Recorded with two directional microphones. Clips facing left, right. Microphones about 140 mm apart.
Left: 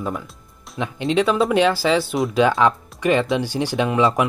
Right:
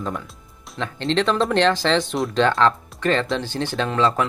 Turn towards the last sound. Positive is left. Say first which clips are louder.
# left 2 dB
turn(degrees=15)  # may be behind; listen again after turning